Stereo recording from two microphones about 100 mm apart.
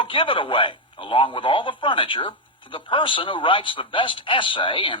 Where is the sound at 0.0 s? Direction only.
60° left (ahead or behind).